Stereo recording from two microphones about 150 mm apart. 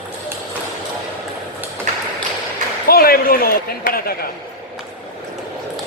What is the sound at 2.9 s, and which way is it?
A man's voice, 85° left.